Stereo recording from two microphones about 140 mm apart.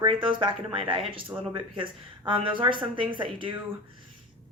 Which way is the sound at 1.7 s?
35° right (ahead or behind).